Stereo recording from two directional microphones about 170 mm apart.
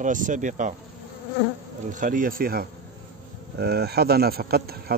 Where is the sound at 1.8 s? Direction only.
50° right (ahead or behind).